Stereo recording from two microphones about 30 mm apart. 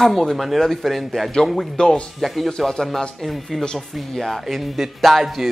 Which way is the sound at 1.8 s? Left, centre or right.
Left.